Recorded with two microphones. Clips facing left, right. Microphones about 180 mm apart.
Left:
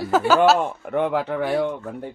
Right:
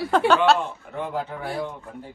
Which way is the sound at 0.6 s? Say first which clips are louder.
Left 7 dB; 65° left (ahead or behind).